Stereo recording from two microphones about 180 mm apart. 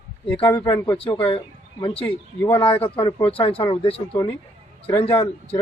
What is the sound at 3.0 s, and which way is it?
Speech, 25° left (ahead or behind).